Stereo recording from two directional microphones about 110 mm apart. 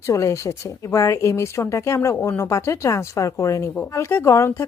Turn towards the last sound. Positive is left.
turn(degrees=25)  # may be behind; listen again after turning